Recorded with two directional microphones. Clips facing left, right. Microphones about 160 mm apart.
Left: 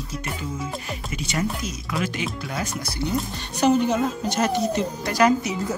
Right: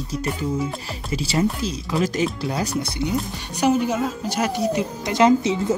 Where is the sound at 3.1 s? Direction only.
10° right (ahead or behind).